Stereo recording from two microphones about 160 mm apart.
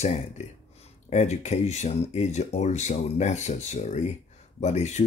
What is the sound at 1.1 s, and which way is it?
Speech, 45° left (ahead or behind).